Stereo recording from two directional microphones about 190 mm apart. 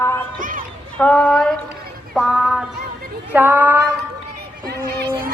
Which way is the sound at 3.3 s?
10° right (ahead or behind).